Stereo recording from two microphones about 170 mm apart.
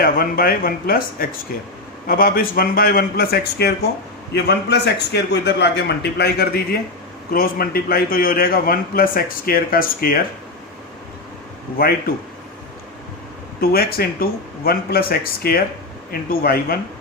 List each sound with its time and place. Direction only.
0.0 s a man's voice: 60° left (ahead or behind)
7.3 s a man's voice: 60° left (ahead or behind)
11.8 s a man's voice: 60° left (ahead or behind)
13.6 s a man's voice: 65° left (ahead or behind)